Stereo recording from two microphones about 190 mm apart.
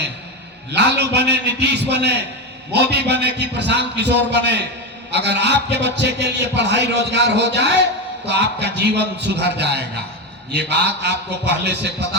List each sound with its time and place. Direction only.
0.7 s a man's voice: 65° right (ahead or behind)